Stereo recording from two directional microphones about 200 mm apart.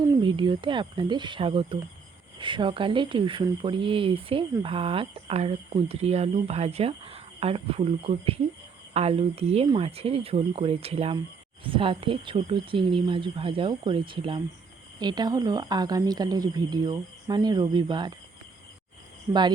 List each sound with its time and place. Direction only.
0.0 s speech: 20° right (ahead or behind)
19.3 s speech: 20° right (ahead or behind)